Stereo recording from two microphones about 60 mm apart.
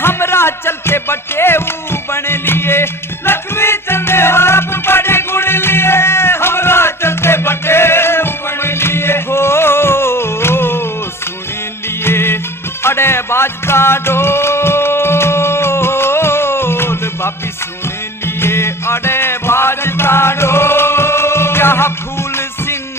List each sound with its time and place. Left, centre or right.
0.0 s music: left
12.0 s music: left
18.3 s music: left